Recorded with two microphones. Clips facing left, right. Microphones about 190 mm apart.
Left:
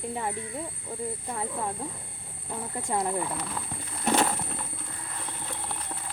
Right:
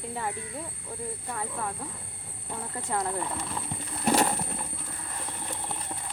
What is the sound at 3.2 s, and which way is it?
Speech, centre (ahead or behind).